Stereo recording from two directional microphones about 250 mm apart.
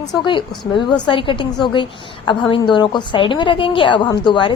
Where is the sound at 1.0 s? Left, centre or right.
Centre.